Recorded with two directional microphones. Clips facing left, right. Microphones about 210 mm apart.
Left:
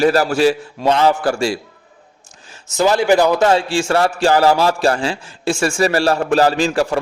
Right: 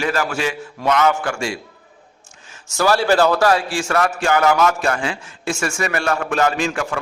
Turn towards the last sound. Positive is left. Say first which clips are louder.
# left 5 dB
turn(degrees=35)  # may be behind; listen again after turning